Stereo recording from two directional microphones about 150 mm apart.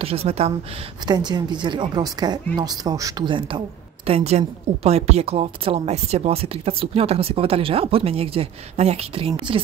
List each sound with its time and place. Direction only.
0.0 s speech: 40° right (ahead or behind)
1.0 s speech: 30° right (ahead or behind)